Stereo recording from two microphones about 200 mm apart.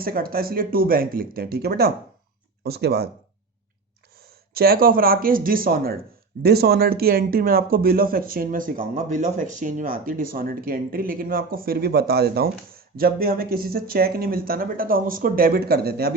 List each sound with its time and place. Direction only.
0.0 s speech: 50° right (ahead or behind)
4.2 s speech: 50° right (ahead or behind)